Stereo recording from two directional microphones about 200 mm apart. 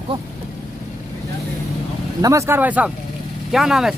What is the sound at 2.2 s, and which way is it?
Speech, 15° right (ahead or behind).